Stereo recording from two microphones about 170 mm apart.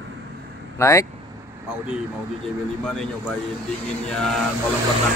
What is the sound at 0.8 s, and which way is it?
Speech, 15° left (ahead or behind).